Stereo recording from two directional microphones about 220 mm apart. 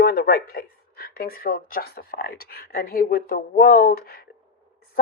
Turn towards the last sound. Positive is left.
turn(degrees=45)  # may be behind; listen again after turning